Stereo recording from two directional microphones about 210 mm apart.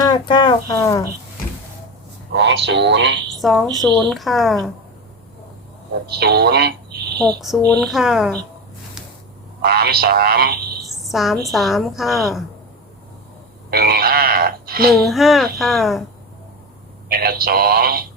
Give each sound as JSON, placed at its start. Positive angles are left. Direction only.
{"t": 0.0, "sound": "speech", "side_deg": 20}
{"t": 2.3, "sound": "speech", "side_deg": -55}
{"t": 3.4, "sound": "a woman's voice", "side_deg": 0}
{"t": 6.1, "sound": "frog", "side_deg": -50}
{"t": 7.2, "sound": "a woman's voice", "side_deg": 0}
{"t": 9.6, "sound": "frog", "side_deg": -50}
{"t": 11.0, "sound": "a sound", "side_deg": 0}
{"t": 11.4, "sound": "a woman's voice", "side_deg": 0}
{"t": 13.7, "sound": "frog", "side_deg": -45}
{"t": 14.9, "sound": "a woman's voice", "side_deg": 0}
{"t": 17.1, "sound": "frog", "side_deg": -45}